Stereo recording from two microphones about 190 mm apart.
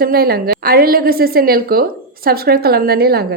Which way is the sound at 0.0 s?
55° right (ahead or behind).